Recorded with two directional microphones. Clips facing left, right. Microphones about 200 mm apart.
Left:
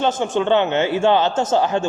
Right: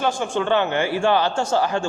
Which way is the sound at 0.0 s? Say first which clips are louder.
Left 3 dB; 20° left (ahead or behind).